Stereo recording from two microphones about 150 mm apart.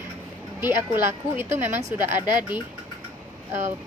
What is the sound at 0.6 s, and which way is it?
Speech, 15° right (ahead or behind).